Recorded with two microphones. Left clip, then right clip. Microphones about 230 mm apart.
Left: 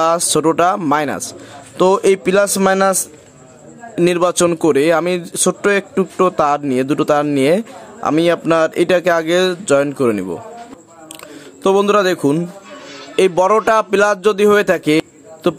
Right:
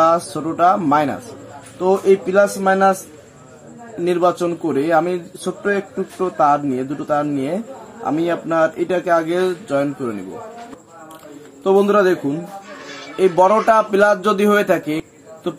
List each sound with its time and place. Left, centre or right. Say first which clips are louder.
0.0 s a man's voice: left 2 dB; left
4.0 s a man's voice: left 3 dB; left
11.6 s a man's voice: left 1 dB; left